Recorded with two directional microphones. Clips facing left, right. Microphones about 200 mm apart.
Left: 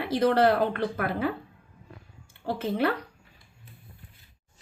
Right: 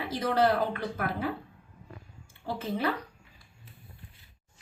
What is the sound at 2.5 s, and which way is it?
Speech, 65° left (ahead or behind).